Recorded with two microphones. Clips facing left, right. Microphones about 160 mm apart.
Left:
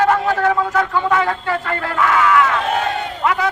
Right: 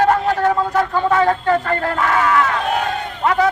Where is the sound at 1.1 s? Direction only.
40° right (ahead or behind).